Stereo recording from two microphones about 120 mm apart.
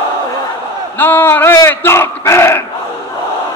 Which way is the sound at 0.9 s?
15° left (ahead or behind).